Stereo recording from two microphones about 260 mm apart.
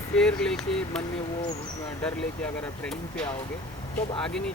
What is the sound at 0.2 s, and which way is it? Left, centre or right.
Speech, centre.